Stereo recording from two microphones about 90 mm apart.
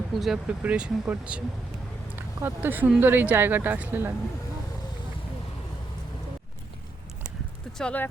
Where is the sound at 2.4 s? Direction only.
20° right (ahead or behind).